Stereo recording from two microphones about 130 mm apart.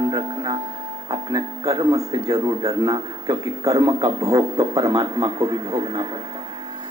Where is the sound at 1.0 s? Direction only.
35° right (ahead or behind).